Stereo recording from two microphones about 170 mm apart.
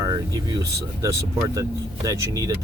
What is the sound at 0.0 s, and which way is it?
Air conditioning, 20° right (ahead or behind).